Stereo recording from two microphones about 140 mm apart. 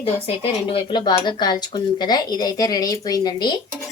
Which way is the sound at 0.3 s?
35° left (ahead or behind).